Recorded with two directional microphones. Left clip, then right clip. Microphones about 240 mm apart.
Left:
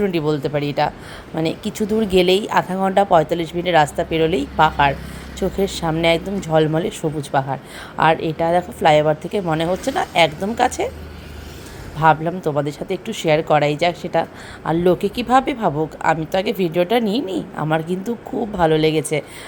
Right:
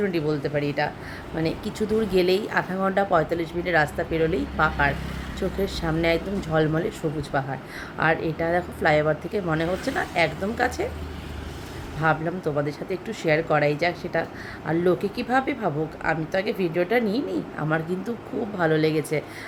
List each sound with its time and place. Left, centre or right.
0.0 s speech: centre
11.9 s speech: centre